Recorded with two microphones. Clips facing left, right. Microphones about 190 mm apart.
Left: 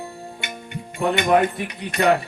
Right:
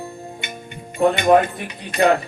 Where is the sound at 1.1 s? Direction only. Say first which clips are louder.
Even; 65° left (ahead or behind).